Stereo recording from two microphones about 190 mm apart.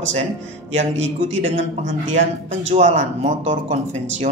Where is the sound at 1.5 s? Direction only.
35° right (ahead or behind).